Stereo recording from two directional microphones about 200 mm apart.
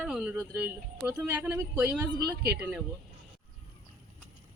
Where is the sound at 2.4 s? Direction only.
50° right (ahead or behind).